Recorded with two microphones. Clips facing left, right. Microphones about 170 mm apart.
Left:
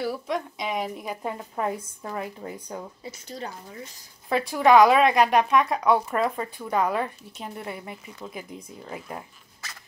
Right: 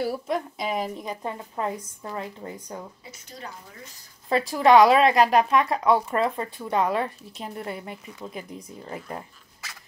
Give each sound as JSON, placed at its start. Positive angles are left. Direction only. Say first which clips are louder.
{"t": 0.0, "sound": "speech", "louder": "right 1 dB", "side_deg": 0}
{"t": 3.1, "sound": "speech", "louder": "left 6 dB", "side_deg": 30}
{"t": 4.5, "sound": "speech", "louder": "even", "side_deg": 0}